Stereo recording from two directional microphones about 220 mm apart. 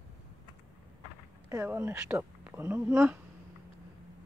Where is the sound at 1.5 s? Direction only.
10° right (ahead or behind).